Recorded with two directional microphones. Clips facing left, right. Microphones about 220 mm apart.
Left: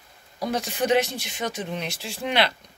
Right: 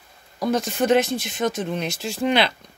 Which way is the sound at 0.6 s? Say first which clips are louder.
Right 2 dB; 50° right (ahead or behind).